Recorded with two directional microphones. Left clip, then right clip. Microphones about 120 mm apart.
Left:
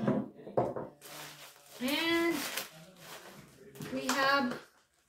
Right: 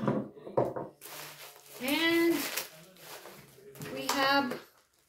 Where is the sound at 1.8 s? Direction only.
25° right (ahead or behind).